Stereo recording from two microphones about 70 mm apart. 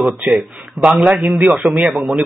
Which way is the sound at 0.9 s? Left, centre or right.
Centre.